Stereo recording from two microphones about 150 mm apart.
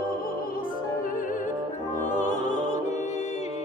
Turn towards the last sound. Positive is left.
turn(degrees=50)  # may be behind; listen again after turning